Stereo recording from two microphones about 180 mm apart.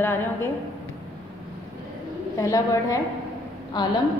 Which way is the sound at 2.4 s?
20° left (ahead or behind).